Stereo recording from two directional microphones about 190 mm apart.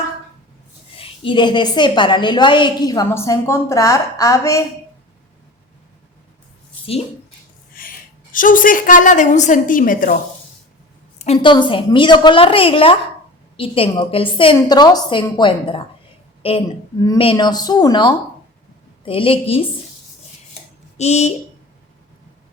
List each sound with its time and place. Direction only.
0.9 s a woman's voice: 30° left (ahead or behind)
7.7 s a woman's voice: 50° left (ahead or behind)
11.2 s a woman's voice: 35° left (ahead or behind)
21.0 s a woman's voice: 35° left (ahead or behind)